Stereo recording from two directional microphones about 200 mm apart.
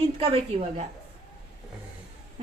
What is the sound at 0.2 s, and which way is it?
Speech, 30° right (ahead or behind).